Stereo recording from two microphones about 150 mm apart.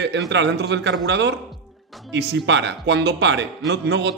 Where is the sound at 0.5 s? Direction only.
90° right.